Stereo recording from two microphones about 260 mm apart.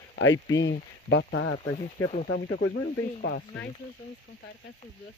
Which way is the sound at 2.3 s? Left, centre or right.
Left.